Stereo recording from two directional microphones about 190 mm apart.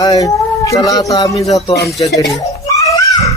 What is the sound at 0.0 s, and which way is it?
Speech, 20° left (ahead or behind).